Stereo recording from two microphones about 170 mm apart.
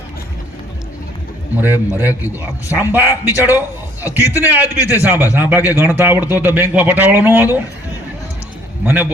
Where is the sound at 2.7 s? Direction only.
10° right (ahead or behind).